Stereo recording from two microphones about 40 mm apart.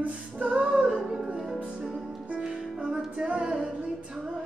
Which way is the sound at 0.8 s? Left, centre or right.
Centre.